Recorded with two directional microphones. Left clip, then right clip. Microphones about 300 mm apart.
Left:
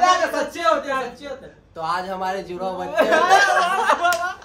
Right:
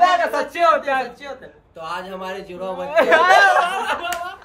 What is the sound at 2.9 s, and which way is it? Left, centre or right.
Speech, right.